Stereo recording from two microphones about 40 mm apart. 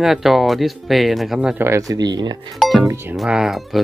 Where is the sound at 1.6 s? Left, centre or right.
Right.